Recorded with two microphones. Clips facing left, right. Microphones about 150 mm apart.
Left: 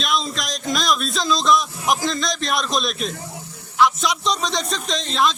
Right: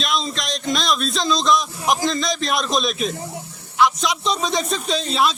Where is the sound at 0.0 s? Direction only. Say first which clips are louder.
Even; centre (ahead or behind).